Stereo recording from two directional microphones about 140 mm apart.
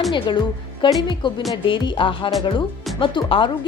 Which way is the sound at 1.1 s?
35° left (ahead or behind).